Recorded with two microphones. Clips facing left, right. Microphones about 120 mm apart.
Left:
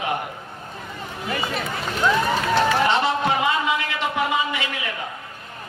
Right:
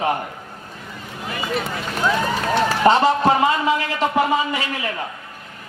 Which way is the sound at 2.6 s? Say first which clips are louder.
Right 4 dB; 40° right (ahead or behind).